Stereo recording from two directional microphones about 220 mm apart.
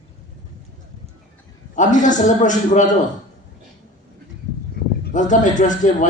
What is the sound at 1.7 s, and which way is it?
A man's voice, 35° left (ahead or behind).